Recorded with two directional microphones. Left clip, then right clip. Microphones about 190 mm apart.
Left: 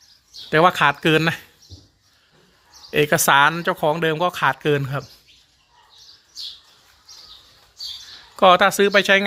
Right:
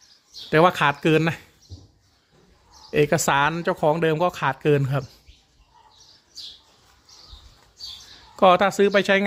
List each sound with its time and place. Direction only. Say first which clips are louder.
0.5 s speech: left 2 dB; 5° right (ahead or behind)
2.9 s speech: left 4 dB; 5° right (ahead or behind)
8.4 s speech: left 3 dB; 5° right (ahead or behind)